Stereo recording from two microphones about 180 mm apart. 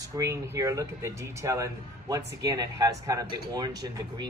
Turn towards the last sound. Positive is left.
turn(degrees=-25)  # may be behind; listen again after turning